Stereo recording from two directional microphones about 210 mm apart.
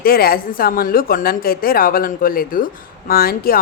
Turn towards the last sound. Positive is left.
turn(degrees=45)  # may be behind; listen again after turning